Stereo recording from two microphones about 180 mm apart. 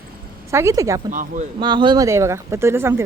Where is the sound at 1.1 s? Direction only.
45° right (ahead or behind).